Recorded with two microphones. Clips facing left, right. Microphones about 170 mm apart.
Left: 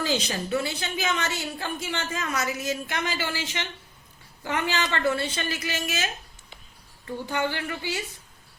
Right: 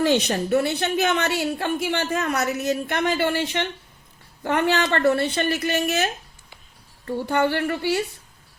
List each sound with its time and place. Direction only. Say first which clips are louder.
0.0 s a woman's voice: right 7 dB; 60° right (ahead or behind)
7.3 s a woman's voice: right 7 dB; 60° right (ahead or behind)